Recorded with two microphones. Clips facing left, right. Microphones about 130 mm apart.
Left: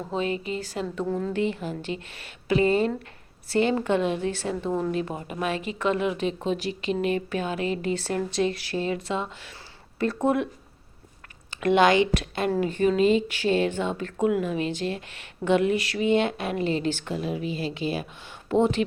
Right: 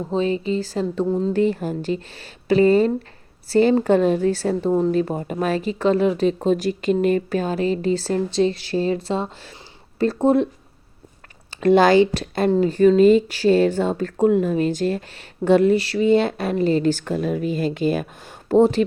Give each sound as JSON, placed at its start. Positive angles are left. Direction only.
{"t": 0.1, "sound": "speech", "side_deg": -30}
{"t": 1.3, "sound": "speech", "side_deg": -40}
{"t": 11.5, "sound": "speech", "side_deg": -35}